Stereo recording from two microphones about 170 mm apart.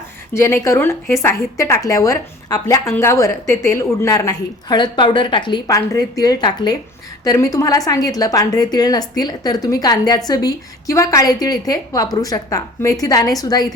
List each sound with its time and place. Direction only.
0.3 s a woman's voice: 15° left (ahead or behind)